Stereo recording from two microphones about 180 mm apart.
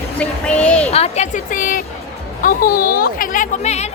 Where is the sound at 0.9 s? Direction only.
35° left (ahead or behind).